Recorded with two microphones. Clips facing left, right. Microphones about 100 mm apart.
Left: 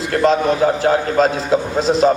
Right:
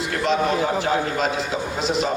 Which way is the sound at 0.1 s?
50° left (ahead or behind).